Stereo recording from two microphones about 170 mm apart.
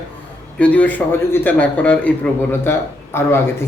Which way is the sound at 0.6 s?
10° left (ahead or behind).